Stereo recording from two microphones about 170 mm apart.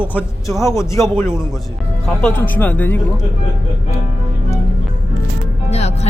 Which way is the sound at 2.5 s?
10° left (ahead or behind).